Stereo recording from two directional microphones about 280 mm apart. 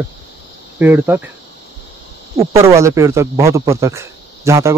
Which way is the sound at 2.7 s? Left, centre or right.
Centre.